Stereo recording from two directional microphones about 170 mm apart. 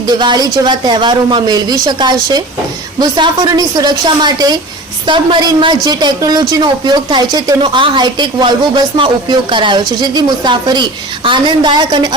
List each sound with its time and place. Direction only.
0.1 s a woman's voice: 25° right (ahead or behind)